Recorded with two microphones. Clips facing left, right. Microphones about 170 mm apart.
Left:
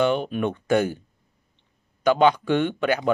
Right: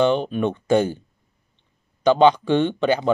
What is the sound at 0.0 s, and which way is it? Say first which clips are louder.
Speech: right 3 dB; 10° left (ahead or behind).